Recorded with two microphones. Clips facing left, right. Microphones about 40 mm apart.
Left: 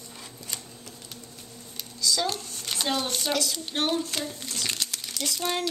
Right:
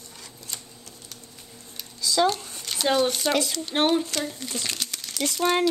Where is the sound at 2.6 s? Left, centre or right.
Centre.